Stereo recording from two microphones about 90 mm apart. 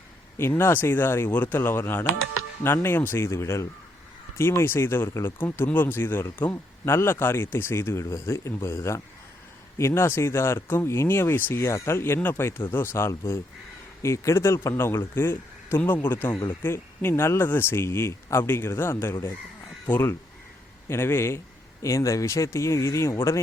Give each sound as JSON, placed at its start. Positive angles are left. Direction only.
{"t": 0.3, "sound": "a man's voice", "side_deg": 30}